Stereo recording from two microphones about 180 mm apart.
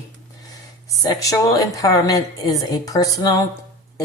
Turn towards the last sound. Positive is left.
turn(degrees=20)  # may be behind; listen again after turning